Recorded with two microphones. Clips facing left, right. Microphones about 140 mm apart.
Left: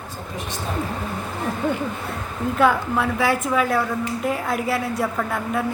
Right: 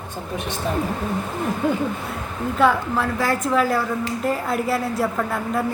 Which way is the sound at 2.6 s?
Centre (ahead or behind).